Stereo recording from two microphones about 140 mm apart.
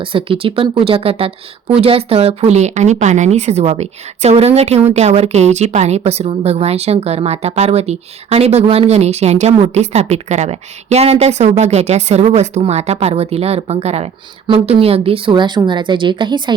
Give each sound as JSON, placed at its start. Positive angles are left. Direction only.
{"t": 0.0, "sound": "speech", "side_deg": -40}